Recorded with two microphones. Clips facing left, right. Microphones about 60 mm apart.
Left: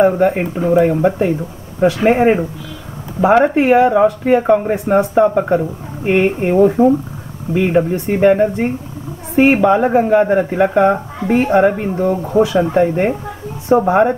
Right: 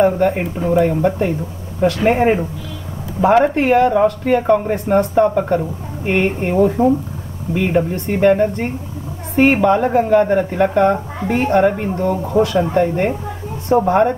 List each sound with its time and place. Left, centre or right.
0.0 s speech: centre